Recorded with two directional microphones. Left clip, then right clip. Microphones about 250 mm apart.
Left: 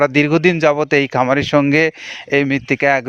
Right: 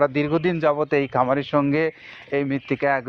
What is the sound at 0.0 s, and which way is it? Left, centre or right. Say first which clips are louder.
Speech: left 7 dB; left.